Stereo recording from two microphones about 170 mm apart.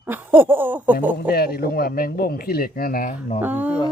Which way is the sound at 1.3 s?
65° left (ahead or behind).